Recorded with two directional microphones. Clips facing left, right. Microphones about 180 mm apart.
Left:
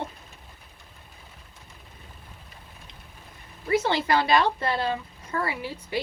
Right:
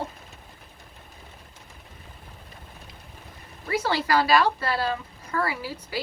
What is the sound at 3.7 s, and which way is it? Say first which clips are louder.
Speech: left 1 dB; 20° left (ahead or behind).